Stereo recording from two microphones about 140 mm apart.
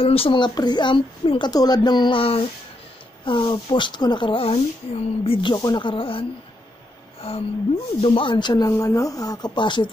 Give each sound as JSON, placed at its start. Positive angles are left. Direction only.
{"t": 0.0, "sound": "speech", "side_deg": 40}
{"t": 1.5, "sound": "speech", "side_deg": 30}
{"t": 7.2, "sound": "a sound", "side_deg": 45}
{"t": 8.0, "sound": "speech", "side_deg": 40}